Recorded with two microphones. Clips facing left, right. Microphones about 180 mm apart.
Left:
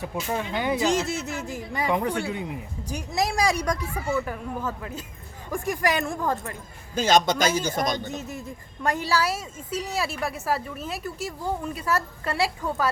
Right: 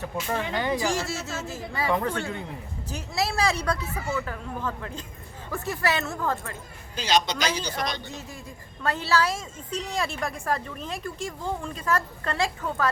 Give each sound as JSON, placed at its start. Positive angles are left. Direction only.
{"t": 0.0, "sound": "a woman's voice", "side_deg": 10}
{"t": 6.9, "sound": "a man's voice", "side_deg": 50}
{"t": 8.0, "sound": "a woman's voice", "side_deg": 20}